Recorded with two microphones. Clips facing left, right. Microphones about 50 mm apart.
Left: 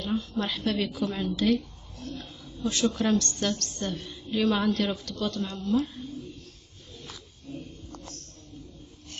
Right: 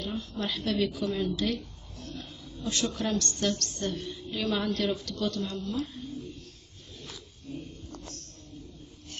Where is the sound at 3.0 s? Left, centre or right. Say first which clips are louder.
Left 4 dB; left.